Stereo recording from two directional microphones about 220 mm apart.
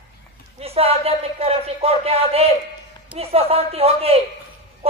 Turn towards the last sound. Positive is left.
turn(degrees=-25)  # may be behind; listen again after turning